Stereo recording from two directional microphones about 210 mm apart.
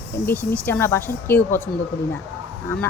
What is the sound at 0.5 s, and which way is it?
Speech, 10° left (ahead or behind).